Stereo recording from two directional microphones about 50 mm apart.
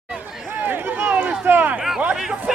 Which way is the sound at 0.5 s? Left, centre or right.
Right.